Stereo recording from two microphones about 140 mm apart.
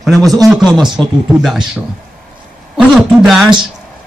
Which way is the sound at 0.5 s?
5° right (ahead or behind).